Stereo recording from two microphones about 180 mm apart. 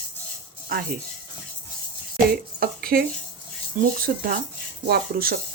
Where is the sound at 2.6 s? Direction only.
55° right (ahead or behind).